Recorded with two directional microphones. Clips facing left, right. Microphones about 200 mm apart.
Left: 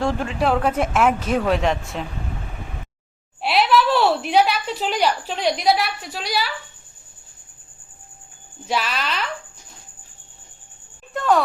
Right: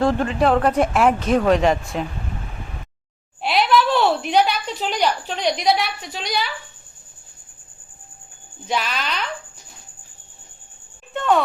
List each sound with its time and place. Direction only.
0.0 s speech: centre (ahead or behind)
3.4 s a woman's voice: centre (ahead or behind)
8.6 s speech: centre (ahead or behind)
11.1 s music: centre (ahead or behind)